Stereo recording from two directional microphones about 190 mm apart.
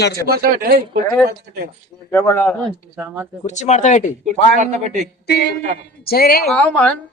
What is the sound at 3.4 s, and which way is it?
Speech, 40° left (ahead or behind).